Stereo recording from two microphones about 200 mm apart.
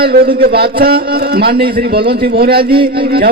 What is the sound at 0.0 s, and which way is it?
A man's voice, 50° right (ahead or behind).